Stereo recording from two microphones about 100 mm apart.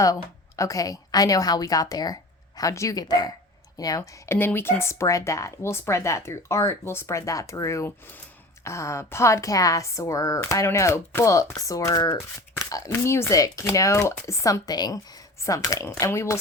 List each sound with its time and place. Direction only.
0.0 s a woman's voice: 35° left (ahead or behind)
4.3 s a woman's voice: 20° left (ahead or behind)